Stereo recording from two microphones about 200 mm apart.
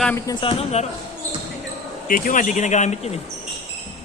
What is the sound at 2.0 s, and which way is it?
Speech, 45° left (ahead or behind).